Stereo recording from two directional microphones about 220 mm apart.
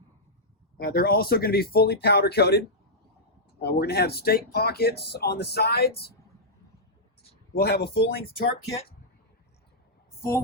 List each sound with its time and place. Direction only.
0.8 s speech: 45° left (ahead or behind)
7.5 s speech: 45° left (ahead or behind)